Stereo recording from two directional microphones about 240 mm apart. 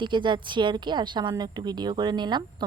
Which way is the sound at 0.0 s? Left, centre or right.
Centre.